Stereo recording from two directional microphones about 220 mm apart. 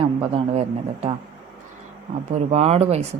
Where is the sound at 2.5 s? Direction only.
30° right (ahead or behind).